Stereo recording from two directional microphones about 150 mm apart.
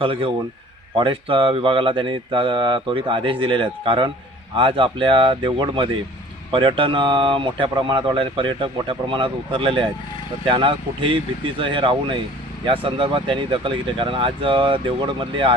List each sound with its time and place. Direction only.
0.0 s speech: 35° right (ahead or behind)